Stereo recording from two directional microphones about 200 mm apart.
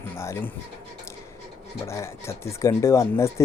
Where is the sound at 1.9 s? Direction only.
15° left (ahead or behind).